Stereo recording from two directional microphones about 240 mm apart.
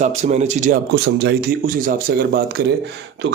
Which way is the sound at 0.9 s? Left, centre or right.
Right.